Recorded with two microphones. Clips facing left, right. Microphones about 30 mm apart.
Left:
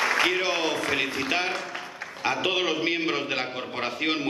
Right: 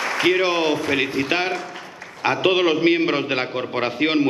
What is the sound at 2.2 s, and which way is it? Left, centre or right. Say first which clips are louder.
A man's voice: right 7 dB; right.